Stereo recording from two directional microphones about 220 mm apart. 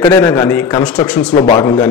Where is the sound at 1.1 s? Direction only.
5° left (ahead or behind).